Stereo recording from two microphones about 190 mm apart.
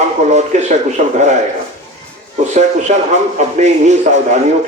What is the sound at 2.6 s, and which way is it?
Speech, 40° right (ahead or behind).